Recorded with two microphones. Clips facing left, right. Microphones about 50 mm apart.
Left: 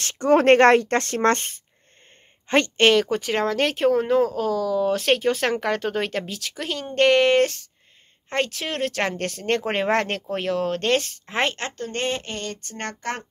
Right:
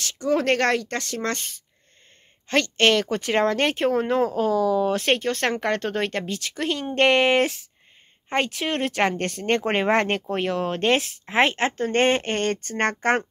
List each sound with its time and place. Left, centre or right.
0.0 s a woman's voice: left
2.4 s a woman's voice: left
2.9 s speech: centre
11.6 s speech: right
12.0 s speech: right